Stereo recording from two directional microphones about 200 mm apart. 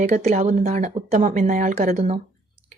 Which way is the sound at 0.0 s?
40° right (ahead or behind).